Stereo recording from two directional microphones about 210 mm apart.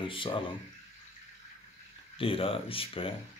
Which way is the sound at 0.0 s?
25° left (ahead or behind).